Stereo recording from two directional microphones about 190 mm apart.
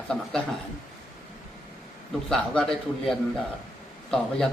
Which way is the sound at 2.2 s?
5° left (ahead or behind).